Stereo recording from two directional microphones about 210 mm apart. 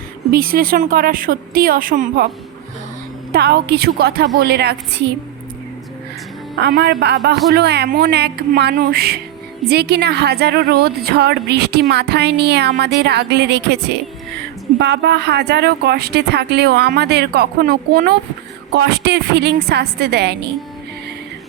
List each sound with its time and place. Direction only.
0.3 s a woman's voice: 45° right (ahead or behind)
3.3 s a woman's voice: 50° right (ahead or behind)
6.6 s a woman's voice: 45° right (ahead or behind)